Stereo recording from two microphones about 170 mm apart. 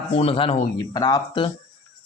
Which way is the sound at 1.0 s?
25° left (ahead or behind).